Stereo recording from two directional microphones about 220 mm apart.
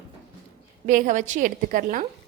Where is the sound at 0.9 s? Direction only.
35° right (ahead or behind).